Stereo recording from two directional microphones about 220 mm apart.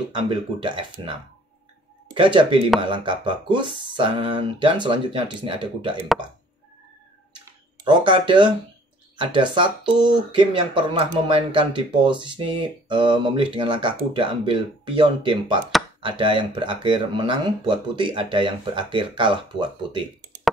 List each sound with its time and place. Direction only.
0.1 s speech: 20° right (ahead or behind)
2.1 s speech: 25° right (ahead or behind)
7.4 s a sound: 20° right (ahead or behind)
9.1 s speech: 20° right (ahead or behind)